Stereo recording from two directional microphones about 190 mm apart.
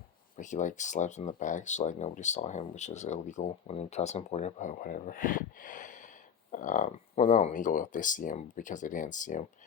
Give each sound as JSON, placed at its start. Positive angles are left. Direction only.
{"t": 0.3, "sound": "speech", "side_deg": 40}